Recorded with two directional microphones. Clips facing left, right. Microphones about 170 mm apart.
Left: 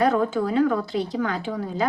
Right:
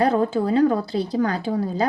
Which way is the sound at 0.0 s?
30° right (ahead or behind).